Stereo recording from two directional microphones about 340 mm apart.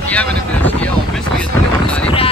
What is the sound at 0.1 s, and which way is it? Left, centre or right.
Speech, centre.